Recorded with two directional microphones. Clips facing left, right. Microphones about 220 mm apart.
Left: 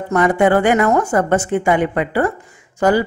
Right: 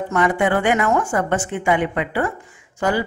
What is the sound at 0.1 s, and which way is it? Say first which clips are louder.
A woman's voice: left 5 dB; 40° left (ahead or behind).